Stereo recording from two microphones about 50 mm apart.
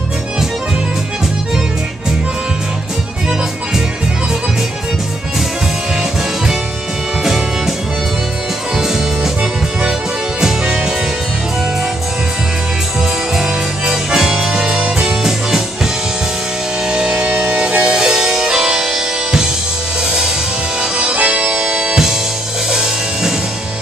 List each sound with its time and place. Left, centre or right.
8.7 s music: centre
13.4 s music: centre
16.9 s music: centre
20.8 s music: centre